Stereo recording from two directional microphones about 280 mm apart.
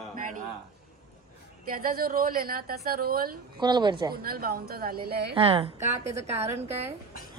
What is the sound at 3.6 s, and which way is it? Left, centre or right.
Speech, centre.